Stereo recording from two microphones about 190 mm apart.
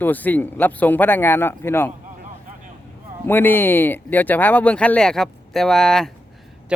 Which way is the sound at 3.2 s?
10° left (ahead or behind).